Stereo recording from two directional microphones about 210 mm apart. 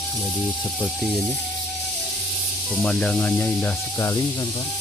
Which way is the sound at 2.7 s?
5° left (ahead or behind).